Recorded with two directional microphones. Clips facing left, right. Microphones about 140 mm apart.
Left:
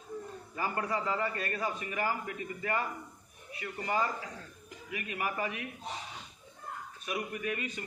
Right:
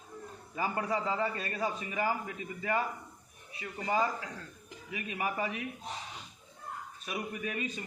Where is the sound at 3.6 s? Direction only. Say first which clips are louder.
Right 1 dB; 20° right (ahead or behind).